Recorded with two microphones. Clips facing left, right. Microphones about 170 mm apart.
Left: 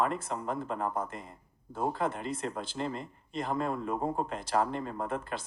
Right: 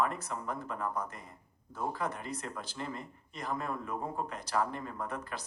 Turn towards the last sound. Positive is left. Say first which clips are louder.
# left 4 dB
turn(degrees=25)  # may be behind; listen again after turning